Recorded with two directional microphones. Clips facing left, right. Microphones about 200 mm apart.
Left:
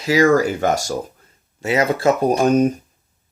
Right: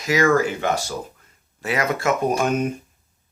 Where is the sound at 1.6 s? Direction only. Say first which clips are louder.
Left 5 dB; 30° left (ahead or behind).